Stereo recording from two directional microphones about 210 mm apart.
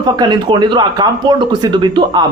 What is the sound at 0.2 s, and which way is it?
Speech, 20° right (ahead or behind).